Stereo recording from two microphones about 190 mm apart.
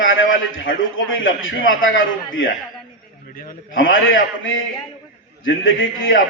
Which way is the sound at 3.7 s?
90° left.